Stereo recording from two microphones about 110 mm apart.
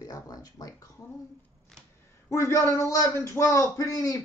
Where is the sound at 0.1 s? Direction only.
35° left (ahead or behind).